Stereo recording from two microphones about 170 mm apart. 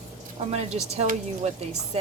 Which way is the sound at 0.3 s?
40° right (ahead or behind).